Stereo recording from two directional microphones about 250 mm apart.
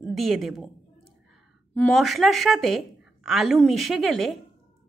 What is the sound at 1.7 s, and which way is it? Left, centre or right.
A woman's voice, centre.